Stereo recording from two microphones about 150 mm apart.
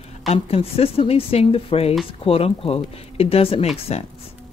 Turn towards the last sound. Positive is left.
turn(degrees=40)  # may be behind; listen again after turning